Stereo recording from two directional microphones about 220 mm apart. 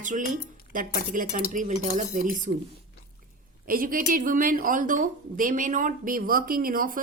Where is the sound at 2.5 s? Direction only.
45° right (ahead or behind).